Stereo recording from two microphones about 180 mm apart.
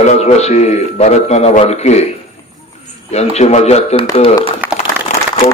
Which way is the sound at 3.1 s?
35° left (ahead or behind).